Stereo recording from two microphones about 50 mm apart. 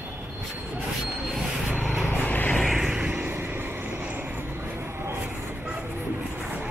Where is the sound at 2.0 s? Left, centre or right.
Left.